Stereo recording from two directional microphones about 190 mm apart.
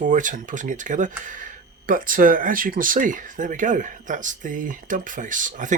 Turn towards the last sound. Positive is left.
turn(degrees=-40)  # may be behind; listen again after turning